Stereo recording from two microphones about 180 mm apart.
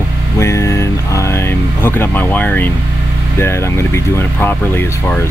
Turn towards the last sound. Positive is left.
turn(degrees=10)  # may be behind; listen again after turning